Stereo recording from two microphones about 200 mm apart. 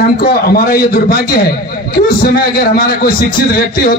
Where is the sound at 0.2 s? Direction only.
50° left (ahead or behind).